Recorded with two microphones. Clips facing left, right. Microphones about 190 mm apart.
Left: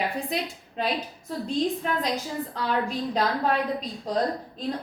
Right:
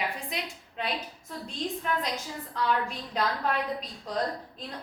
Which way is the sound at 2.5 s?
35° left (ahead or behind).